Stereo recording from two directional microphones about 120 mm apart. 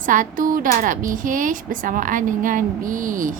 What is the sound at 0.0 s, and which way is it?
A woman's voice, 90° right.